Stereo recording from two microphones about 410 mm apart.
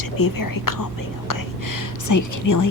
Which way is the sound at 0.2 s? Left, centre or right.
Left.